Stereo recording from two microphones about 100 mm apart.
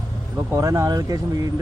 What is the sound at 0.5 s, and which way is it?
Speech, 30° right (ahead or behind).